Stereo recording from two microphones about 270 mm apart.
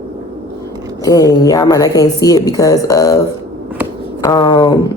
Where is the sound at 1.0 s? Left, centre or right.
Centre.